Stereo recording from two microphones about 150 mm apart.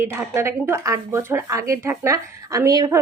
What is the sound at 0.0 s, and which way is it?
Speech, 20° right (ahead or behind).